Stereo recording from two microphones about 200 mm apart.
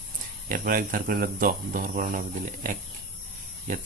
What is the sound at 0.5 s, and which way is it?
Speech, 45° right (ahead or behind).